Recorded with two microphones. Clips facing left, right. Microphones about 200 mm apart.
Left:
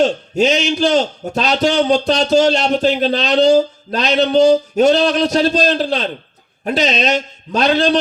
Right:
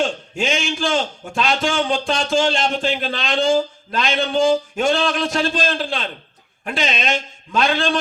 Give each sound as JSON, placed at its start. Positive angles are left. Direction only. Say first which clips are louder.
{"t": 0.0, "sound": "a man's voice", "louder": "left 8 dB", "side_deg": 40}